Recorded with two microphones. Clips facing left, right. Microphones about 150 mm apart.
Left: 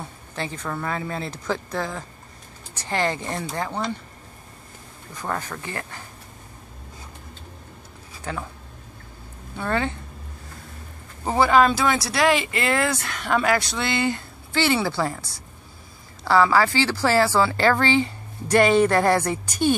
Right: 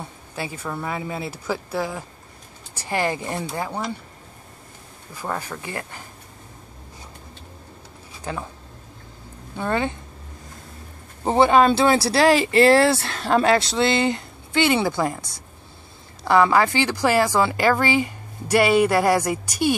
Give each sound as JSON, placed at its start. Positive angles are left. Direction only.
{"t": 0.4, "sound": "speech", "side_deg": -10}
{"t": 5.1, "sound": "speech", "side_deg": -10}
{"t": 8.2, "sound": "speech", "side_deg": -15}
{"t": 9.6, "sound": "speech", "side_deg": -20}
{"t": 11.2, "sound": "speech", "side_deg": -25}